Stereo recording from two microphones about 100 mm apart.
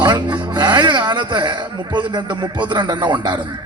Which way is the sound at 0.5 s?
50° right (ahead or behind).